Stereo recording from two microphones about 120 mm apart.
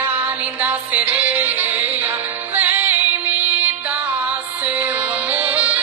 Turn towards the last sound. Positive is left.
turn(degrees=-15)  # may be behind; listen again after turning